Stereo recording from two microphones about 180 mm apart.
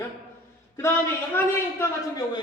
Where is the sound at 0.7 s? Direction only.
15° left (ahead or behind).